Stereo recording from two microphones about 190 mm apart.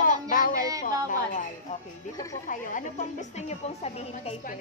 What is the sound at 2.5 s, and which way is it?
A woman's voice, 40° left (ahead or behind).